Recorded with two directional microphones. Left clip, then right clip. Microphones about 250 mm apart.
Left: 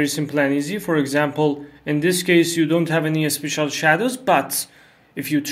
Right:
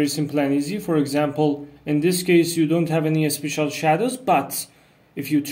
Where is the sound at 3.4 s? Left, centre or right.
Left.